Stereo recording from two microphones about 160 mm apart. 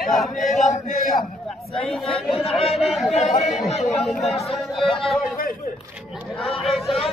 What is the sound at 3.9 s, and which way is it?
Speech, centre (ahead or behind).